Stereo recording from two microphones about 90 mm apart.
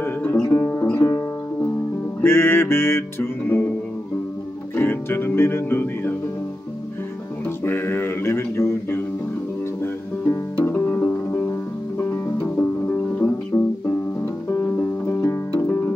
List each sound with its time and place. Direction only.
0.0 s music: 20° left (ahead or behind)
2.2 s music: 25° left (ahead or behind)
4.7 s music: 25° left (ahead or behind)
7.4 s a sound: 25° left (ahead or behind)
9.8 s music: 25° left (ahead or behind)